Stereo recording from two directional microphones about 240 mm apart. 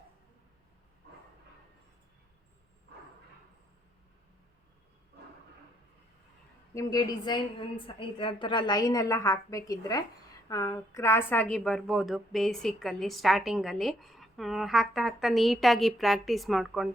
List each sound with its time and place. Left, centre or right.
6.7 s a woman's voice: centre